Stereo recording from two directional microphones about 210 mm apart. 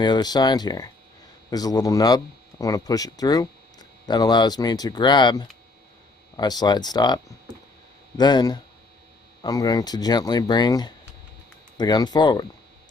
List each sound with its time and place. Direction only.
0.0 s speech: 20° left (ahead or behind)
8.2 s speech: 20° left (ahead or behind)